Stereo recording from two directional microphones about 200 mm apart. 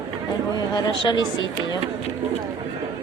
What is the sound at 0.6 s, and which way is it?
Speech, 20° left (ahead or behind).